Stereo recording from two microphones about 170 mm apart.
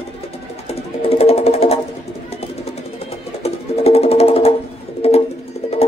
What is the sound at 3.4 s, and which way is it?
Music, 35° left (ahead or behind).